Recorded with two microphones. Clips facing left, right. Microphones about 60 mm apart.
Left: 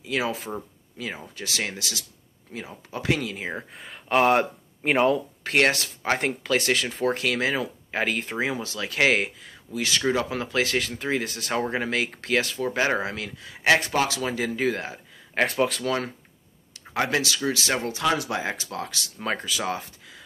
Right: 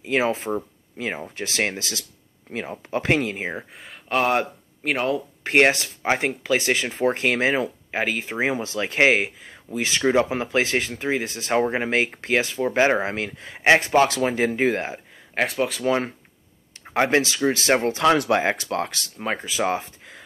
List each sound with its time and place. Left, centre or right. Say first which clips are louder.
0.0 s speech: right 5 dB; right
2.5 s speech: right 8 dB; right
3.5 s speech: right 1 dB; centre
5.4 s speech: right 6 dB; right
7.9 s speech: even; centre
8.4 s speech: right 4 dB; right
14.0 s speech: right 6 dB; right
15.3 s speech: even; centre
15.8 s speech: right 4 dB; right
18.0 s speech: right 6 dB; right
19.1 s speech: right 1 dB; centre
19.6 s speech: right 6 dB; right